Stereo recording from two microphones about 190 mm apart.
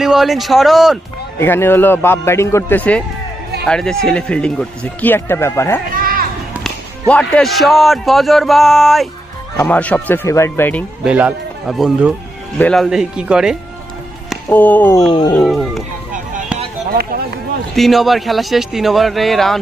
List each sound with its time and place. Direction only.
0.0 s speech: centre (ahead or behind)
1.4 s a man's voice: 10° left (ahead or behind)
5.9 s children playing: 50° right (ahead or behind)
7.1 s a man's voice: 5° left (ahead or behind)
11.1 s speech: 5° right (ahead or behind)
14.5 s a man's voice: 10° left (ahead or behind)
15.4 s speech: centre (ahead or behind)
16.9 s speech: 55° right (ahead or behind)
17.7 s speech: centre (ahead or behind)